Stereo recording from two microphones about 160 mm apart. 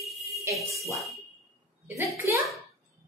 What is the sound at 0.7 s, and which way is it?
Speech, 20° right (ahead or behind).